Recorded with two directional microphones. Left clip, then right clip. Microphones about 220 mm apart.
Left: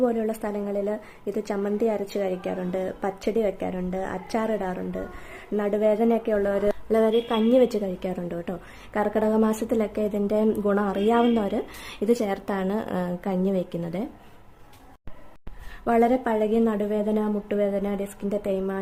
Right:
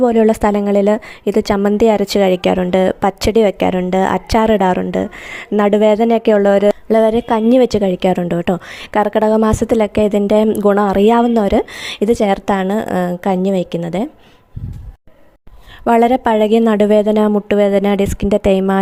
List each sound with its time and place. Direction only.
0.0 s a woman's voice: 40° right (ahead or behind)
15.8 s a woman's voice: 40° right (ahead or behind)